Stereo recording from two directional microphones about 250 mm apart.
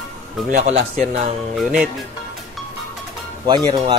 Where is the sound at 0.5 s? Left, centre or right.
Right.